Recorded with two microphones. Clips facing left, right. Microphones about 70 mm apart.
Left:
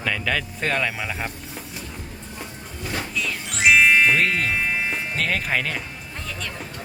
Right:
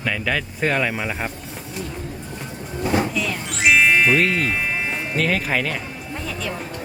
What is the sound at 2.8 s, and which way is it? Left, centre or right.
Vehicle, right.